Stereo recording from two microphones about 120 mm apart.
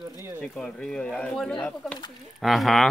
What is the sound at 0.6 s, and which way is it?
Speech, 5° left (ahead or behind).